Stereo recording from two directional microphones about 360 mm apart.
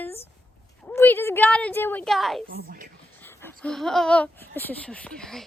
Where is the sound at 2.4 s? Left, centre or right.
Right.